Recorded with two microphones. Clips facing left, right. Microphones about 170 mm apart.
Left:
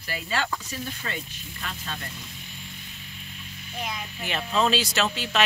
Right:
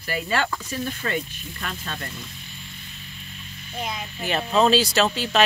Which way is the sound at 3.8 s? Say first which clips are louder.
Right 3 dB; 25° right (ahead or behind).